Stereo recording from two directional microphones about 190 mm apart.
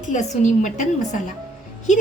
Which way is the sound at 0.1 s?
40° left (ahead or behind).